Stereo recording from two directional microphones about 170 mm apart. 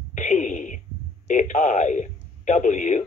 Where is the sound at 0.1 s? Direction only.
45° left (ahead or behind).